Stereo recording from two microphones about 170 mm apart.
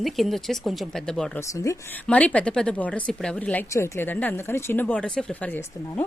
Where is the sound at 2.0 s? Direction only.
5° left (ahead or behind).